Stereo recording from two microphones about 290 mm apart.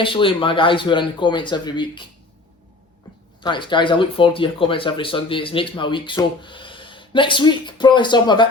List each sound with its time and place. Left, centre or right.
0.0 s speech: centre
3.4 s speech: centre